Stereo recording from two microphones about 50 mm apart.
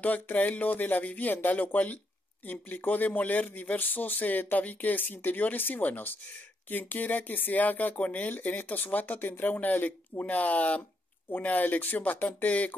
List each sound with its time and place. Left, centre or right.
0.0 s a man's voice: left